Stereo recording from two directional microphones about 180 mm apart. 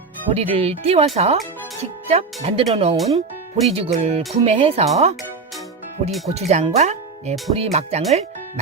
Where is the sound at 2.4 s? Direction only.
35° right (ahead or behind).